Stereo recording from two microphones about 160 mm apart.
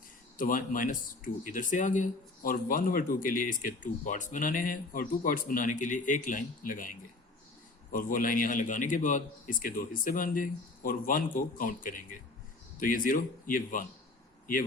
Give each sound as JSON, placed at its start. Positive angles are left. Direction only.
{"t": 0.3, "sound": "speech", "side_deg": 60}
{"t": 7.9, "sound": "speech", "side_deg": 60}